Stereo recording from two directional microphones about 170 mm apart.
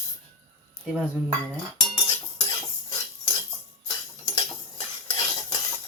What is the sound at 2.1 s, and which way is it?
Cutlery, 25° left (ahead or behind).